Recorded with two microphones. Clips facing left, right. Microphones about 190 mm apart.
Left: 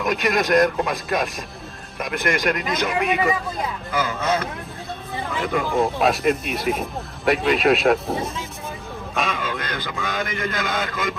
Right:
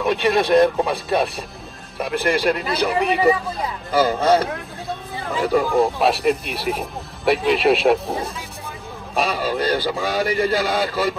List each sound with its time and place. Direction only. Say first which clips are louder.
0.0 s a man's voice: right 3 dB; 30° right (ahead or behind)
5.6 s speech: right 1 dB; centre (ahead or behind)
9.1 s a man's voice: right 5 dB; 35° right (ahead or behind)